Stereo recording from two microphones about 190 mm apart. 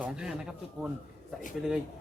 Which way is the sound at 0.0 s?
5° right (ahead or behind).